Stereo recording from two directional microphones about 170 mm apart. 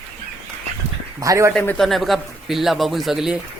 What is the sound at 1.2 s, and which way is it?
Speech, 20° right (ahead or behind).